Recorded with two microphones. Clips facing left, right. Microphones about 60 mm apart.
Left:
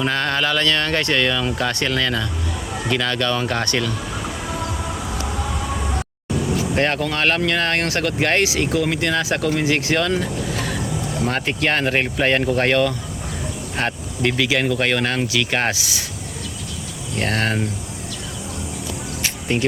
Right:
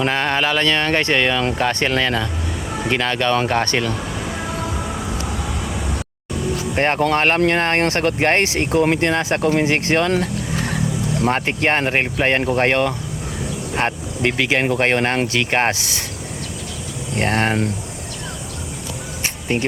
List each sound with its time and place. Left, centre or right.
0.0 s mantra: right
1.5 s speech: right
6.7 s speech: right
10.5 s vehicle: right
11.3 s mantra: right
12.5 s speech: right
17.2 s speech: right
19.2 s music: right